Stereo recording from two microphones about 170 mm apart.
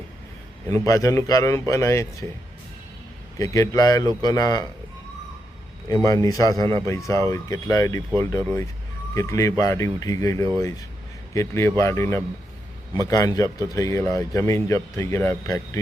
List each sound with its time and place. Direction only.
0.7 s speech: 20° left (ahead or behind)
3.3 s speech: 20° left (ahead or behind)
5.9 s speech: 20° left (ahead or behind)